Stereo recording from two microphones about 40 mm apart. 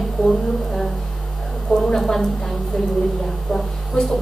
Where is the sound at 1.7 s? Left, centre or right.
Centre.